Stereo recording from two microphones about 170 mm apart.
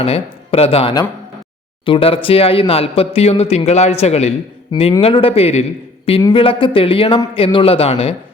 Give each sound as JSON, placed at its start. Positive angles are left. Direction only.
{"t": 0.0, "sound": "speech", "side_deg": 35}